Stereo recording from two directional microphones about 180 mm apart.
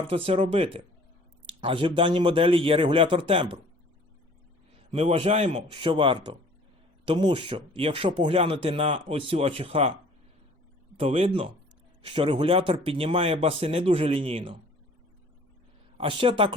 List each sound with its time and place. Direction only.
0.1 s speech: 30° right (ahead or behind)
4.9 s speech: 30° right (ahead or behind)
10.9 s speech: 30° right (ahead or behind)
16.0 s speech: 30° right (ahead or behind)